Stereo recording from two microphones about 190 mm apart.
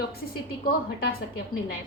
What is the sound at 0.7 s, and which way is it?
Speech, 50° left (ahead or behind).